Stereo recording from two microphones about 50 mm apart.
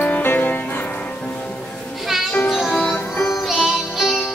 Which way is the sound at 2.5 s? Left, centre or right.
Centre.